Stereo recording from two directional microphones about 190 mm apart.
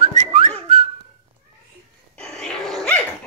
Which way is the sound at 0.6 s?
35° right (ahead or behind).